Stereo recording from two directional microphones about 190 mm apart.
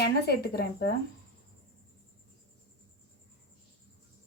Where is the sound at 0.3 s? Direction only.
55° left (ahead or behind).